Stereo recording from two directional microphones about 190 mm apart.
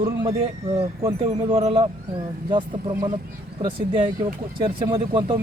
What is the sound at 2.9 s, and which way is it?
Speech, 15° right (ahead or behind).